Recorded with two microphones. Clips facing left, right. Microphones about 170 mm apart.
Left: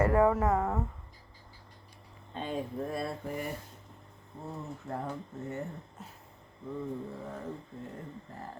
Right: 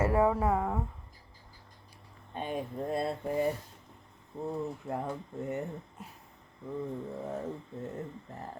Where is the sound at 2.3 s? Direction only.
15° right (ahead or behind).